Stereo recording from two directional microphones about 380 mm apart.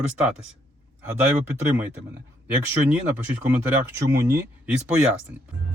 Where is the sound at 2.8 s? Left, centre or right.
Centre.